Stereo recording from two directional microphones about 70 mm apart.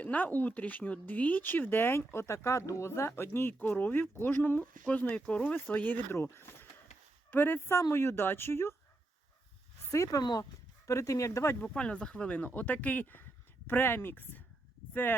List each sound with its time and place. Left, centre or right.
0.0 s speech: left
2.1 s speech: left
4.6 s a woman's voice: centre; by 8.7 s left
9.9 s speech: left
10.8 s speech: left
11.6 s speech: centre; by 14.4 s left